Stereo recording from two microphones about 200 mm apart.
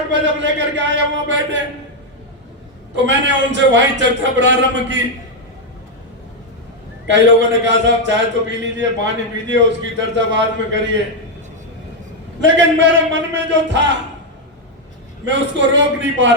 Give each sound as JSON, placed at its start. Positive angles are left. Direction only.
{"t": 0.1, "sound": "a man's voice", "side_deg": -65}
{"t": 2.9, "sound": "a man's voice", "side_deg": -65}
{"t": 7.1, "sound": "a man's voice", "side_deg": -65}
{"t": 12.4, "sound": "a man's voice", "side_deg": -65}
{"t": 15.2, "sound": "a man's voice", "side_deg": -65}